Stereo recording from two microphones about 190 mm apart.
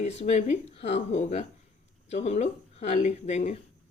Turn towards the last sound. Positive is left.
turn(degrees=35)  # may be behind; listen again after turning